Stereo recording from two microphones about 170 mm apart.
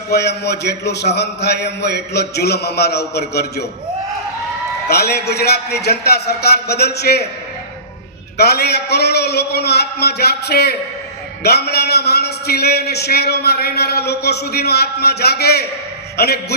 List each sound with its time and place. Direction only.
0.1 s a man's voice: 75° left (ahead or behind)
4.9 s a man's voice: 70° left (ahead or behind)
8.4 s a man's voice: 70° left (ahead or behind)